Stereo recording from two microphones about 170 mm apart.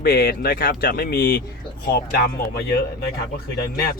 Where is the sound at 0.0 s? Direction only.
65° left (ahead or behind).